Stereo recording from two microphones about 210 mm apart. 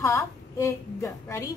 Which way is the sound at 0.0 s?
15° left (ahead or behind).